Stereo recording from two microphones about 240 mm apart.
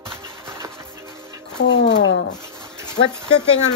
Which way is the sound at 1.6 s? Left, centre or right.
Left.